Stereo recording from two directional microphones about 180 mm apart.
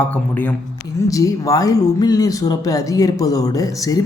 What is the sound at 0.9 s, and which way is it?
Speech, 20° left (ahead or behind).